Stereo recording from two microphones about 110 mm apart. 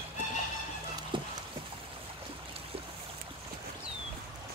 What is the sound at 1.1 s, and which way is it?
Clip-clop, 45° right (ahead or behind).